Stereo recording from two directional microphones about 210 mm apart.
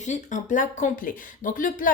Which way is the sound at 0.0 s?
35° left (ahead or behind).